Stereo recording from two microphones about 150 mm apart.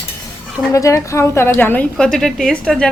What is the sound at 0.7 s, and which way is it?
A woman's voice, 20° left (ahead or behind).